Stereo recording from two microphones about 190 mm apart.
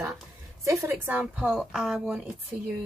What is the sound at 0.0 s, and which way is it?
A woman's voice, 15° right (ahead or behind).